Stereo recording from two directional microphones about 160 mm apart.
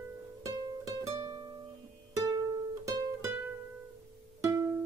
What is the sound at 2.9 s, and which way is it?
Music, 25° right (ahead or behind).